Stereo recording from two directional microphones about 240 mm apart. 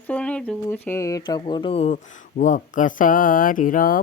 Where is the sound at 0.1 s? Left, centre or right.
Centre.